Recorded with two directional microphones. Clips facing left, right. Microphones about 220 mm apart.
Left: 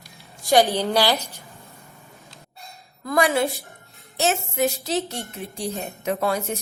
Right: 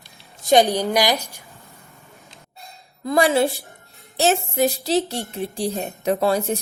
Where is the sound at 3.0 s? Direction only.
30° right (ahead or behind).